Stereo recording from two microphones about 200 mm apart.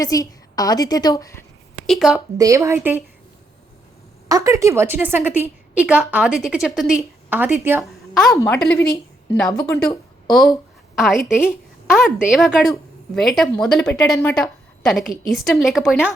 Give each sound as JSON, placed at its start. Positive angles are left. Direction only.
{"t": 0.0, "sound": "a woman's voice", "side_deg": 15}
{"t": 1.9, "sound": "a woman's voice", "side_deg": 0}
{"t": 2.4, "sound": "a woman's voice", "side_deg": -15}
{"t": 4.3, "sound": "a woman's voice", "side_deg": -15}
{"t": 7.8, "sound": "a sound", "side_deg": 0}
{"t": 8.3, "sound": "a woman's voice", "side_deg": 15}
{"t": 10.2, "sound": "a woman's voice", "side_deg": 0}